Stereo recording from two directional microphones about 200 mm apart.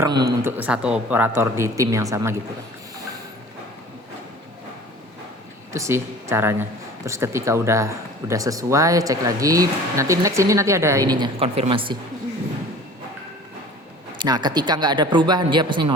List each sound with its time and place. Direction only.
0.0 s speech: 20° right (ahead or behind)
0.4 s speech: 10° right (ahead or behind)
5.7 s speech: 15° right (ahead or behind)
14.2 s speech: 20° right (ahead or behind)